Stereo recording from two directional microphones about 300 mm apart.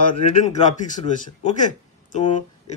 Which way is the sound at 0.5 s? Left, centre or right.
Left.